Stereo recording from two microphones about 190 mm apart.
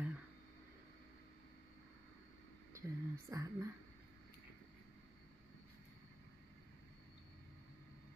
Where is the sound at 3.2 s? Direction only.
15° right (ahead or behind).